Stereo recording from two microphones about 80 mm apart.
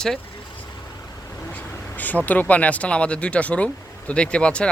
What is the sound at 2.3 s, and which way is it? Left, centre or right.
Speech, centre.